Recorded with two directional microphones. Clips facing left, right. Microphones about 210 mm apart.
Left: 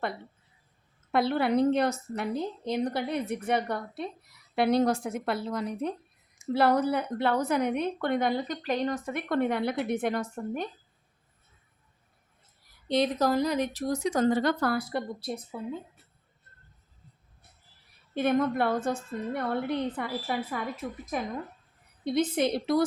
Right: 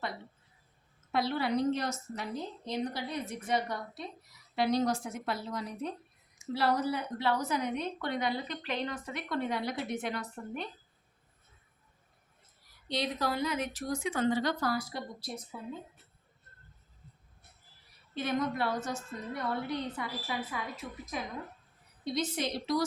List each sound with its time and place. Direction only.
1.1 s a woman's voice: 55° left (ahead or behind)
12.9 s speech: 45° left (ahead or behind)
18.1 s a woman's voice: 55° left (ahead or behind)
22.0 s a woman's voice: 55° left (ahead or behind)